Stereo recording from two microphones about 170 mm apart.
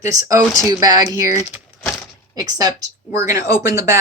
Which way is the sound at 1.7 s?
Centre (ahead or behind).